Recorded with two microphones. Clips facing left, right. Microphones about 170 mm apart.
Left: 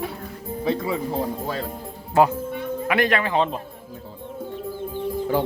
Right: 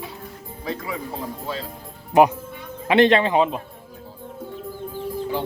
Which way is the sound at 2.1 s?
20° right (ahead or behind).